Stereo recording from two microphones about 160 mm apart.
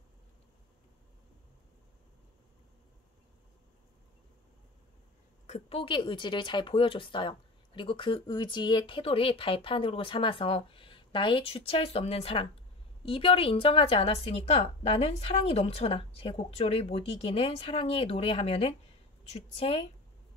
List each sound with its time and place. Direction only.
5.5 s a woman's voice: 35° left (ahead or behind)